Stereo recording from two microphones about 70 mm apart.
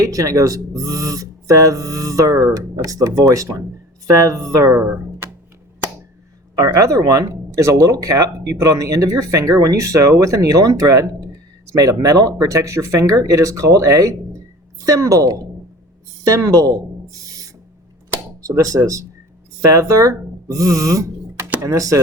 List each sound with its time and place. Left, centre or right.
0.0 s speech: right
4.8 s a sound: right
6.6 s a woman's voice: right
18.4 s speech: right